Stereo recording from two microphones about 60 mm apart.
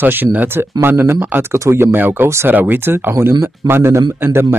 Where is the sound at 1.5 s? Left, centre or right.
Right.